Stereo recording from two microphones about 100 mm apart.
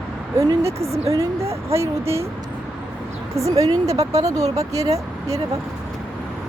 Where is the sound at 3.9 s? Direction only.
90° right.